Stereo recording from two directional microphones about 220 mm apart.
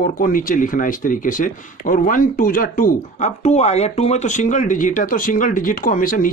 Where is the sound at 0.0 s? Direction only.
40° left (ahead or behind).